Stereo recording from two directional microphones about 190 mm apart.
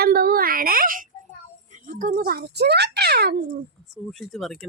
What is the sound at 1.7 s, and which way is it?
A child's voice, 45° right (ahead or behind).